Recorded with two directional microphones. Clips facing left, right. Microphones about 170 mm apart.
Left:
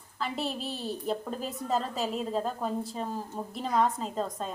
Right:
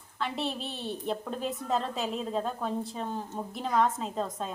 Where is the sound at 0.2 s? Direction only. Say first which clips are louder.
Even; centre (ahead or behind).